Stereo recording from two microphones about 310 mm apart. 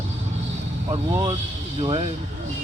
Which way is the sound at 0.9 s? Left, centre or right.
Centre.